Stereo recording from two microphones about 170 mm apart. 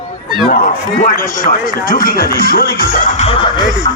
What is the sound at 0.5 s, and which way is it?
A man's voice, 55° left (ahead or behind).